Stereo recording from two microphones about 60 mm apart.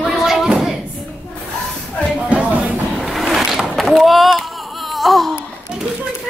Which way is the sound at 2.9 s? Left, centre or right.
Centre.